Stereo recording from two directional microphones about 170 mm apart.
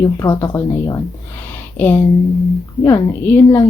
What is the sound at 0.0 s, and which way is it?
A woman's voice, 15° left (ahead or behind).